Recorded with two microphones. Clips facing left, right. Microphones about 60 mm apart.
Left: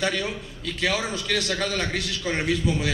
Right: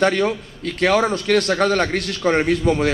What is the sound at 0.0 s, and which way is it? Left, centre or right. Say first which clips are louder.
A man's voice: right 9 dB; right.